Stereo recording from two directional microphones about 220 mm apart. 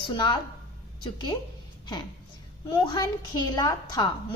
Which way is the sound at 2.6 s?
20° left (ahead or behind).